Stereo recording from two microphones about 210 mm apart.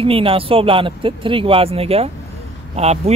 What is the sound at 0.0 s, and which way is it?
Speech, 25° right (ahead or behind).